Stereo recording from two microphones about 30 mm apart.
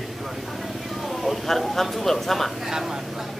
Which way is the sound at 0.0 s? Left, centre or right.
Centre.